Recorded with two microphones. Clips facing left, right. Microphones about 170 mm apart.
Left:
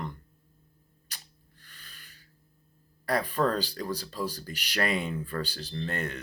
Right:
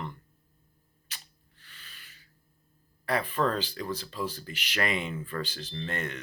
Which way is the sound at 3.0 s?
40° left (ahead or behind).